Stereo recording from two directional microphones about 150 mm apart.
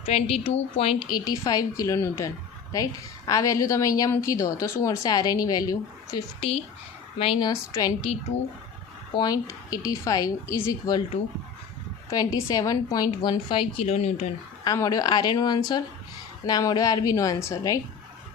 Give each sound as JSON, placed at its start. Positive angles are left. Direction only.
{"t": 0.0, "sound": "a woman's voice", "side_deg": 40}
{"t": 7.2, "sound": "a woman's voice", "side_deg": 30}
{"t": 9.1, "sound": "a woman's voice", "side_deg": 25}
{"t": 12.1, "sound": "a woman's voice", "side_deg": 25}
{"t": 14.6, "sound": "a woman's voice", "side_deg": 25}